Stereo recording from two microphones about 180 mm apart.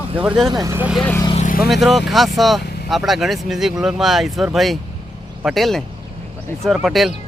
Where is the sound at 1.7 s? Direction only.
Centre (ahead or behind).